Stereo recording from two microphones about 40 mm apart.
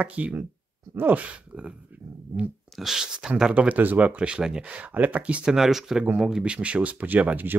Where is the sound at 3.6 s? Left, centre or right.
Right.